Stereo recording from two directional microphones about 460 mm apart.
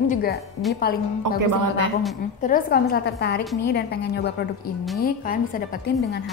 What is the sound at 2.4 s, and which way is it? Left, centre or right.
A woman's voice, centre.